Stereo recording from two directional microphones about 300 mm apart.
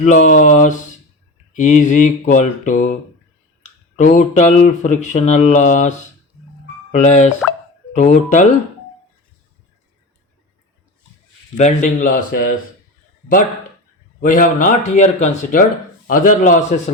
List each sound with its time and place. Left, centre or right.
0.0 s speech: left
3.9 s speech: left
6.9 s speech: left
11.5 s speech: left
14.2 s speech: left